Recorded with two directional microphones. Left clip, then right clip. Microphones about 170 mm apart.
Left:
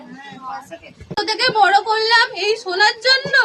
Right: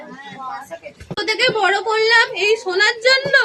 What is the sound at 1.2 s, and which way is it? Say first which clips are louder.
Speech: left 1 dB; 20° left (ahead or behind).